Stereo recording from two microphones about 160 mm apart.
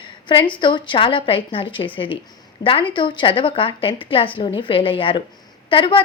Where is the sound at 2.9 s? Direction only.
30° left (ahead or behind).